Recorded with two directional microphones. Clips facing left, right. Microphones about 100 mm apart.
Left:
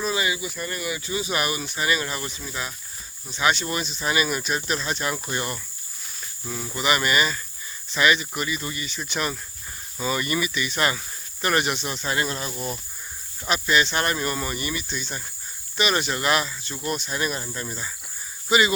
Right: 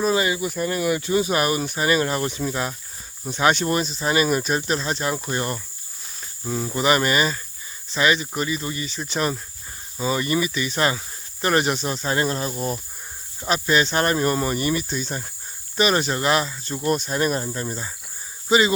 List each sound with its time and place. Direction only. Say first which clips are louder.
0.0 s speech: right 5 dB; 40° right (ahead or behind)
0.8 s speech: right 9 dB; 55° right (ahead or behind); by 18.7 s 30° right (ahead or behind)